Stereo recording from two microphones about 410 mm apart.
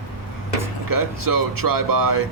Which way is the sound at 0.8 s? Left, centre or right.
Right.